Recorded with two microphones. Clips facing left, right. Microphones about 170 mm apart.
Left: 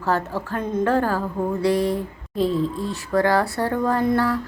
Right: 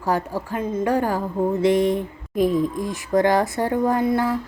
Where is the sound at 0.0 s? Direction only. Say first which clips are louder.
Even; 15° right (ahead or behind).